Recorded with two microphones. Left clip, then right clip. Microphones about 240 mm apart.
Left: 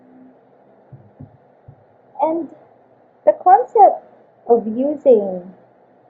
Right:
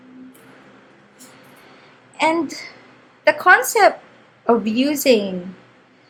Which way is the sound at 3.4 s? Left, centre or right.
Right.